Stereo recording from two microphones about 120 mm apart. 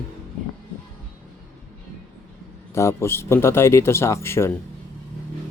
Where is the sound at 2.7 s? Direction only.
25° left (ahead or behind).